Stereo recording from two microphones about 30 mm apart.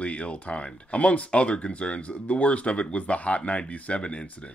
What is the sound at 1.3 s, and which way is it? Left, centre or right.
Speech, left.